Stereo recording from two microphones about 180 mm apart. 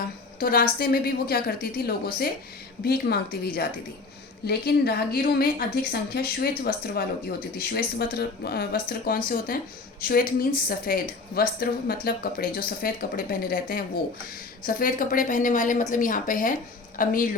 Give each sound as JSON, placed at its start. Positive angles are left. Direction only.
{"t": 0.3, "sound": "a woman's voice", "side_deg": 50}